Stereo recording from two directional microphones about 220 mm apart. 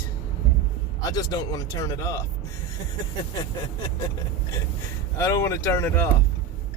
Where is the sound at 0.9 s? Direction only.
15° left (ahead or behind).